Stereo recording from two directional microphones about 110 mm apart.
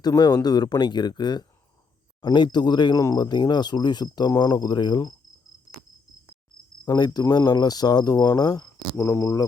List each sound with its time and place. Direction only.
0.0 s speech: 35° left (ahead or behind)
6.8 s speech: 40° left (ahead or behind)